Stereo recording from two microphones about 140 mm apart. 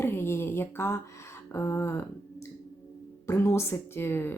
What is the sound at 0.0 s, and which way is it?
Speech, 15° left (ahead or behind).